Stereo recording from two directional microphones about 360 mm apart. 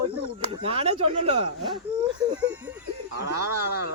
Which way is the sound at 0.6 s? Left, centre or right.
Centre.